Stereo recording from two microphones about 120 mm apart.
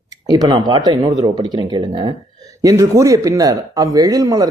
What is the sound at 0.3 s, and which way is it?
Speech, 35° right (ahead or behind).